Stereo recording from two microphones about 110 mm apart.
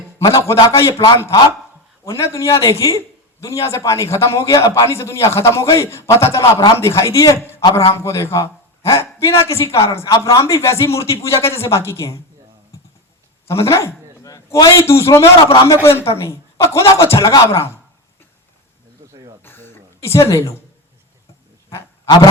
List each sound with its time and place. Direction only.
0.3 s a man's voice: 25° left (ahead or behind)
13.5 s a man's voice: 25° left (ahead or behind)
19.4 s a sound: 20° left (ahead or behind)